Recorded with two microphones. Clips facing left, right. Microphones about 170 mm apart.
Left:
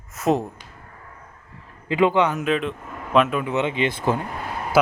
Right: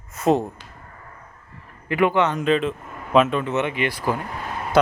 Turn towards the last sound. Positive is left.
turn(degrees=5)  # may be behind; listen again after turning